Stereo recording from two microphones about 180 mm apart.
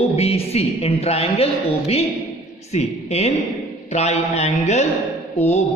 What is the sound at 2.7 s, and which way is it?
A woman's voice, 35° left (ahead or behind).